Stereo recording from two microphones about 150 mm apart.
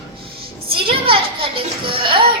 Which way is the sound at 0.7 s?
35° right (ahead or behind).